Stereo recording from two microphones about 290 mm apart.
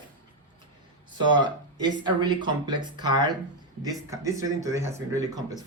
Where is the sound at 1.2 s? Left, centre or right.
Centre.